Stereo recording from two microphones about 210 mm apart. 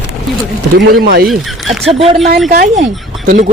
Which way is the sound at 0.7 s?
45° right (ahead or behind).